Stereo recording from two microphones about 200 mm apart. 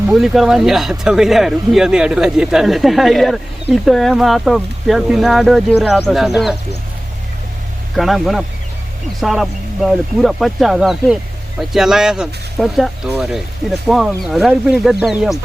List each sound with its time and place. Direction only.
0.1 s speech: centre (ahead or behind)
7.9 s speech: centre (ahead or behind)